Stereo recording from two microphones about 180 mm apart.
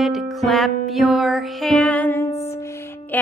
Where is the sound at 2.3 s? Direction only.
35° left (ahead or behind).